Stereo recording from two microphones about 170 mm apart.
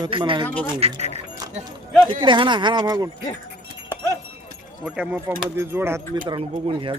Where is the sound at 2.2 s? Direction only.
30° right (ahead or behind).